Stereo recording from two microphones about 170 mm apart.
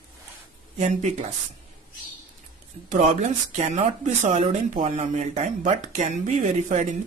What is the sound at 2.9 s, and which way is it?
Speech, 45° right (ahead or behind).